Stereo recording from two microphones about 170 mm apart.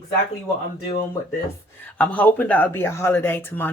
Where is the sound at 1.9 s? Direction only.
10° left (ahead or behind).